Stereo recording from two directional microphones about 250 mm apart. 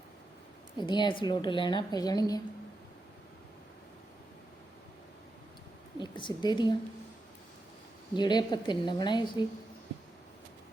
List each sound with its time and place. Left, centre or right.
0.8 s a woman's voice: centre
6.0 s a woman's voice: centre
8.1 s a woman's voice: centre